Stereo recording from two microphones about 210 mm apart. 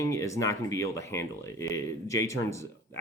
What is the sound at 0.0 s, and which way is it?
Speech, 15° left (ahead or behind).